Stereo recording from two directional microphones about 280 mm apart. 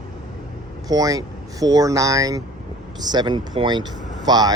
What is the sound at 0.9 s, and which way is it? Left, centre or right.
Speech, centre.